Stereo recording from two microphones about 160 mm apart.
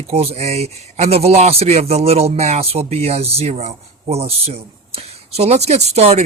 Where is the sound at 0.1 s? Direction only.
40° right (ahead or behind).